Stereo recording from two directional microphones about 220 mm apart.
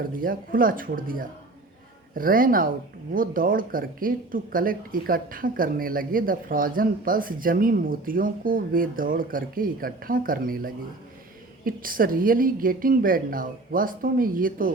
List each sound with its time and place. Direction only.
0.2 s speech: 40° right (ahead or behind)